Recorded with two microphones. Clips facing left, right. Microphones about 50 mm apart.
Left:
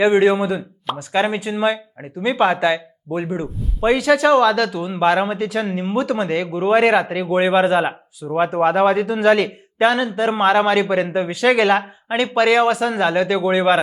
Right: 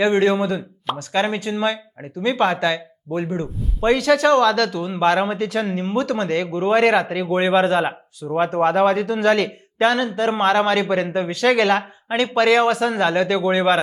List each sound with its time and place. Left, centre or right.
0.0 s a man's voice: centre